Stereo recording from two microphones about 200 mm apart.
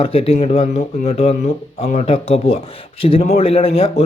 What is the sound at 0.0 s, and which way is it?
Speech, 30° left (ahead or behind).